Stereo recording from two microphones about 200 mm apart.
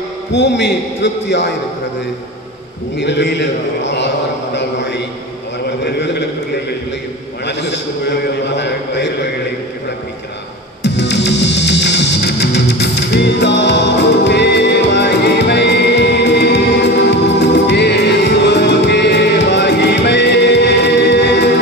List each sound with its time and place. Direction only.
0.3 s a man's voice: 60° left (ahead or behind)
3.0 s a man's voice: 60° left (ahead or behind)
5.9 s a sound: 55° left (ahead or behind)
10.8 s music: 60° left (ahead or behind)